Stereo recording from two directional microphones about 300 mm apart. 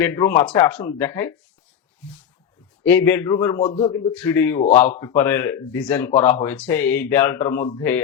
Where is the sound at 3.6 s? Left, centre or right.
Left.